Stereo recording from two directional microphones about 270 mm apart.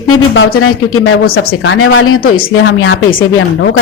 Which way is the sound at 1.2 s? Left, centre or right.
Left.